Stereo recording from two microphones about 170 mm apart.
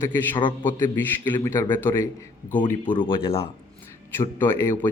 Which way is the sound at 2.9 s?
30° left (ahead or behind).